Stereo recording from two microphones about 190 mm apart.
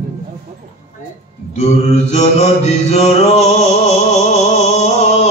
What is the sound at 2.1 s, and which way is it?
Mantra, 35° left (ahead or behind).